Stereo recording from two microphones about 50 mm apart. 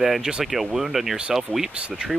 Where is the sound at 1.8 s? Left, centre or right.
Right.